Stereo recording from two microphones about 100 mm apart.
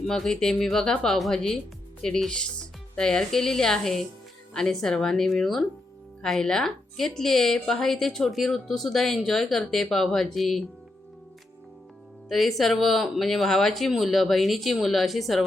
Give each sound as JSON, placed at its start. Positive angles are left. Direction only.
{"t": 0.1, "sound": "a woman's voice", "side_deg": 5}
{"t": 12.3, "sound": "a woman's voice", "side_deg": 0}